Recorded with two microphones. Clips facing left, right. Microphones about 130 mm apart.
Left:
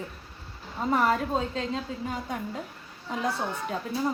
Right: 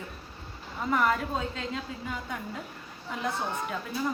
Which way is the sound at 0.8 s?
35° left (ahead or behind).